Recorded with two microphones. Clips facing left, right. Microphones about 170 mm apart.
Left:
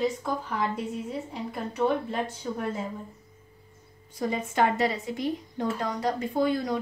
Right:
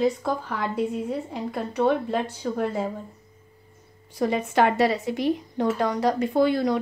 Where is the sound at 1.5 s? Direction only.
70° right (ahead or behind).